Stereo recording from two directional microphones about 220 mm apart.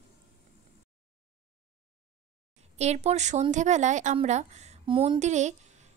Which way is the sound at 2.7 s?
30° right (ahead or behind).